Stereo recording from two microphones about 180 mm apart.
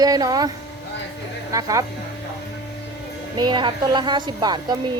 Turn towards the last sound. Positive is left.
turn(degrees=-25)  # may be behind; listen again after turning